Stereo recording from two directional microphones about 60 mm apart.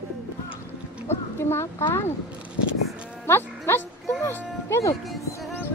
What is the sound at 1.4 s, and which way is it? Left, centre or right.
Speech, left.